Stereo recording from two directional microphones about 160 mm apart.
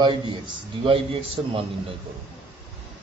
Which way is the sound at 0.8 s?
35° right (ahead or behind).